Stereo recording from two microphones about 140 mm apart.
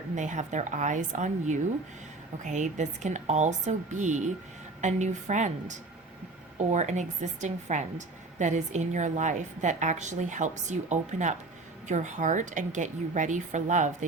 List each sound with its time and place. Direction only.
0.2 s a woman's voice: 60° right (ahead or behind)